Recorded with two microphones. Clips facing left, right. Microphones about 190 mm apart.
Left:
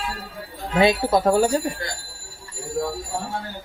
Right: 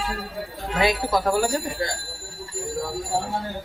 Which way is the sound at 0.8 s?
25° left (ahead or behind).